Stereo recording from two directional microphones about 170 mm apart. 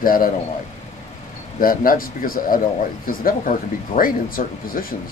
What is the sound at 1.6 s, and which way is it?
Speech, 55° left (ahead or behind).